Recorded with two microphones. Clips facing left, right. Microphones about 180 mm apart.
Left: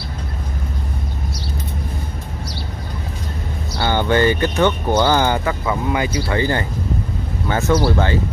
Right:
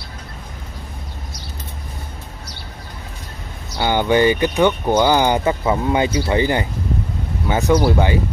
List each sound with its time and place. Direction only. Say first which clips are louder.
3.7 s speech: right 1 dB; 15° right (ahead or behind)